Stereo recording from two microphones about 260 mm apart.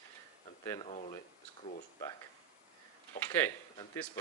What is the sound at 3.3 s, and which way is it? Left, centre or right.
Speech, centre.